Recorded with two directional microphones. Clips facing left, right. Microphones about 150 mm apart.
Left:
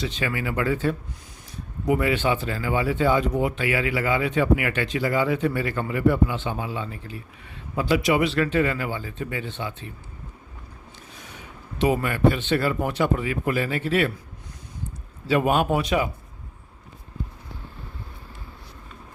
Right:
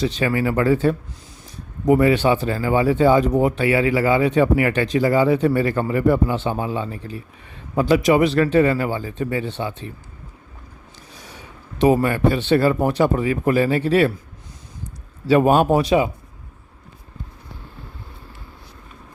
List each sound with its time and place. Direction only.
0.0 s speech: 35° right (ahead or behind)
11.1 s a sound: 35° right (ahead or behind)
11.8 s speech: 40° right (ahead or behind)
15.3 s speech: 35° right (ahead or behind)